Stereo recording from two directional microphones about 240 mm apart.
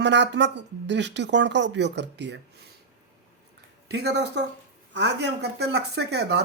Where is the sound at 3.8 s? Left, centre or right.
Right.